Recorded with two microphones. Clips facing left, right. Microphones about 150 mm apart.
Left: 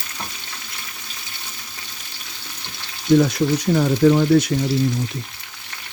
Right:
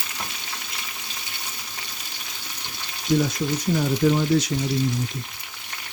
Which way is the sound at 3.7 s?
60° left (ahead or behind).